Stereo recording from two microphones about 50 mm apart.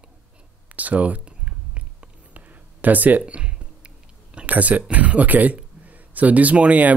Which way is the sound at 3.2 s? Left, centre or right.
Right.